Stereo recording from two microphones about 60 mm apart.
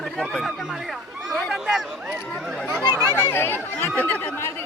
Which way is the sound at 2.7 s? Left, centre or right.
Right.